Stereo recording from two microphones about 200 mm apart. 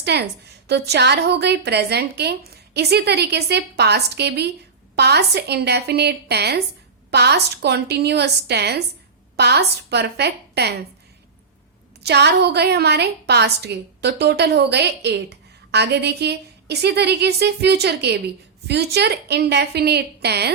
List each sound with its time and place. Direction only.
0.0 s a woman's voice: 55° right (ahead or behind)
12.0 s a woman's voice: 55° right (ahead or behind)